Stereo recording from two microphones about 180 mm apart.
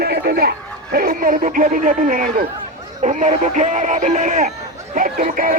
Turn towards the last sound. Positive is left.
turn(degrees=-50)  # may be behind; listen again after turning